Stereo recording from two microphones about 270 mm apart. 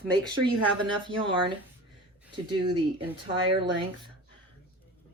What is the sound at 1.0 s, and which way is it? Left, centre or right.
Speech, centre.